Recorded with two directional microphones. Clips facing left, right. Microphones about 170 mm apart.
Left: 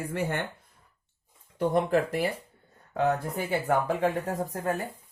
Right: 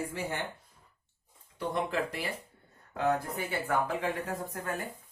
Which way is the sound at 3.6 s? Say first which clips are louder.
Left 5 dB; 40° left (ahead or behind).